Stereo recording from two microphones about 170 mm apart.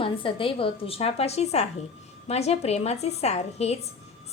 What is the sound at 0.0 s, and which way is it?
A woman's voice, 30° left (ahead or behind).